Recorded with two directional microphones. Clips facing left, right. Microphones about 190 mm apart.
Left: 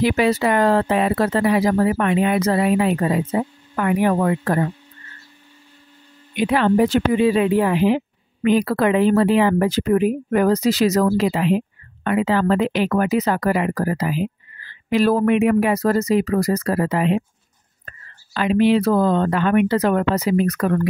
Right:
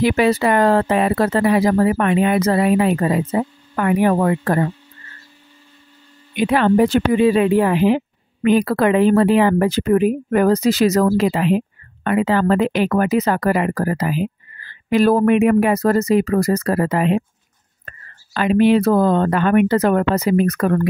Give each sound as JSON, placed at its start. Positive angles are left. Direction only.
{"t": 0.0, "sound": "speech", "side_deg": -55}
{"t": 6.4, "sound": "speech", "side_deg": -55}